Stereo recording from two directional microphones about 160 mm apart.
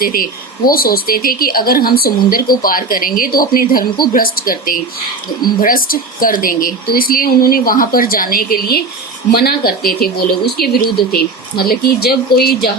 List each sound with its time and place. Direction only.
0.0 s a woman's voice: 65° left (ahead or behind)